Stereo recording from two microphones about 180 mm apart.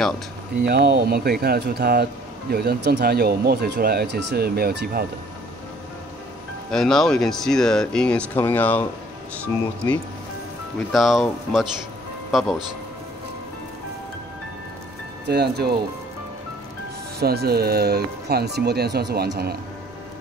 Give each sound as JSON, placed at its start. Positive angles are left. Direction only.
{"t": 0.7, "sound": "speech", "side_deg": -65}
{"t": 6.7, "sound": "speech", "side_deg": 0}
{"t": 9.8, "sound": "speech", "side_deg": 15}
{"t": 10.9, "sound": "speech", "side_deg": 0}
{"t": 15.2, "sound": "speech", "side_deg": -65}
{"t": 17.2, "sound": "speech", "side_deg": -60}